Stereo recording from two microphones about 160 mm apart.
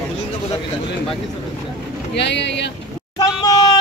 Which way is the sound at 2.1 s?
90° left.